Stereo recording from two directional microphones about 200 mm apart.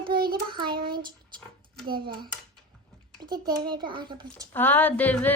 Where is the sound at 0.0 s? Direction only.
45° right (ahead or behind).